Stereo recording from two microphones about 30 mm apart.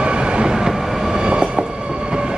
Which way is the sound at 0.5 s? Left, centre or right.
Centre.